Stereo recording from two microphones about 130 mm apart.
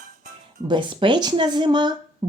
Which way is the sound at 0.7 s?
40° right (ahead or behind).